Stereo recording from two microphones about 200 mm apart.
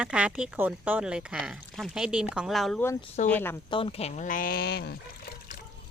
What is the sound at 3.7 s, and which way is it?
Speech, 25° left (ahead or behind).